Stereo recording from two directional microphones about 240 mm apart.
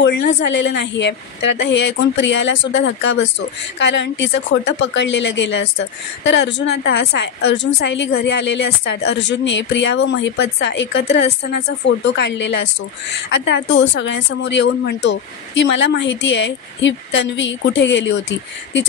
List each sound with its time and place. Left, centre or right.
0.0 s speech: left